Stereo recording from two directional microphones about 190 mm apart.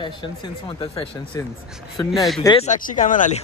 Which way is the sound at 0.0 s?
25° left (ahead or behind).